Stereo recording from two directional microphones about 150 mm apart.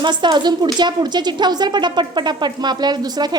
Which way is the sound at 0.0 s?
30° right (ahead or behind).